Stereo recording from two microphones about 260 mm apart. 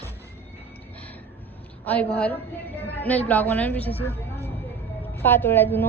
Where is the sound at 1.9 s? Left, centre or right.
Centre.